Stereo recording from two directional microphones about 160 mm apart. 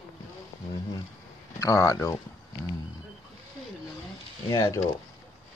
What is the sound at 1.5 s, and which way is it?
Speech, 20° left (ahead or behind).